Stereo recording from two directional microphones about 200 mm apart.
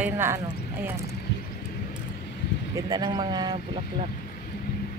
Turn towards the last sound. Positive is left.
turn(degrees=-20)  # may be behind; listen again after turning